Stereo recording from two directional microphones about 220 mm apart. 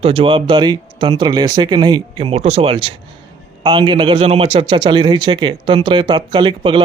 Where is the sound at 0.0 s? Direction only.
25° right (ahead or behind).